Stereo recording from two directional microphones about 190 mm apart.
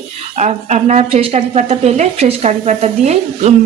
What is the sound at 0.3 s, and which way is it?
A woman's voice, 35° right (ahead or behind).